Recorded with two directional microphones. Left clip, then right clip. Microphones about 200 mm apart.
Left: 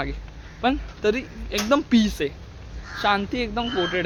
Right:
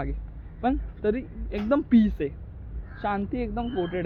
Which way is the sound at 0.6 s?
5° left (ahead or behind).